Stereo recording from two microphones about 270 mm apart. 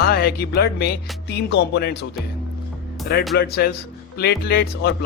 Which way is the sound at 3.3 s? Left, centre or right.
Left.